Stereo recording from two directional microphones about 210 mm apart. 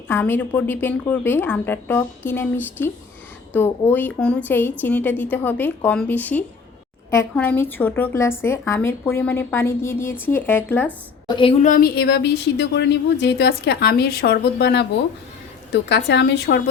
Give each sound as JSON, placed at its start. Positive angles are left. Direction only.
{"t": 0.1, "sound": "a woman's voice", "side_deg": 10}
{"t": 11.3, "sound": "a woman's voice", "side_deg": 25}
{"t": 11.6, "sound": "speech", "side_deg": 40}